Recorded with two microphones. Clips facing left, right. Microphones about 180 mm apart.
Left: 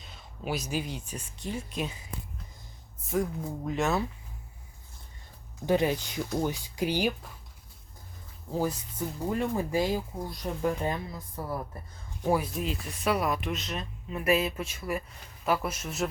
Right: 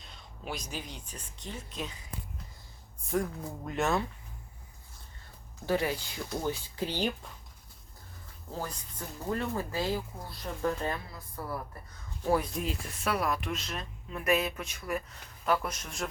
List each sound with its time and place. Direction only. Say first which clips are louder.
0.0 s speech: left 5 dB; 5° left (ahead or behind)
3.7 s speech: left 1 dB; centre (ahead or behind)
5.6 s speech: left 4 dB; 20° left (ahead or behind)
8.5 s a woman's voice: left 9 dB; 10° left (ahead or behind)
12.2 s speech: left 1 dB; 10° left (ahead or behind)